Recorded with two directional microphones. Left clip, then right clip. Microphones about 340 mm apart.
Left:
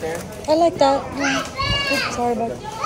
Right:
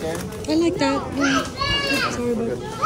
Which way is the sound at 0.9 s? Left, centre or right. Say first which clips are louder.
Left 1 dB; centre.